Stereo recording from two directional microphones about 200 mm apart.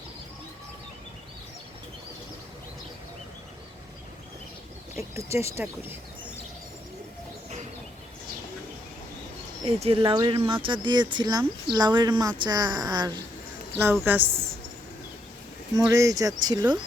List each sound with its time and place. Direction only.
4.9 s speech: 15° right (ahead or behind)
9.6 s speech: 30° right (ahead or behind)
14.0 s speech: 10° right (ahead or behind)
15.7 s speech: 15° right (ahead or behind)